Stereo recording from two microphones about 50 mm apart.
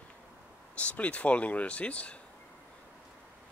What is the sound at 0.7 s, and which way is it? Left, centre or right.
Speech, left.